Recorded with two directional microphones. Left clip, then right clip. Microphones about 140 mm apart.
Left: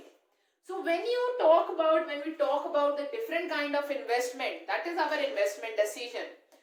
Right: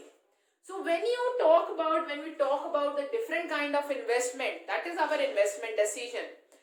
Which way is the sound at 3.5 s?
25° right (ahead or behind).